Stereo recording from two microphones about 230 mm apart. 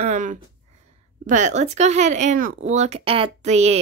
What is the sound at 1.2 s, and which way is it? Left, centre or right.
Speech, right.